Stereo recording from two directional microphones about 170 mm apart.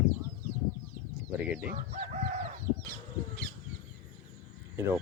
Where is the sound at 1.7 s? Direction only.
55° right (ahead or behind).